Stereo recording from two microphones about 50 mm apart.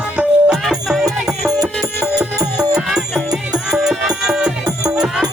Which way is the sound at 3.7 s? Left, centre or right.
Centre.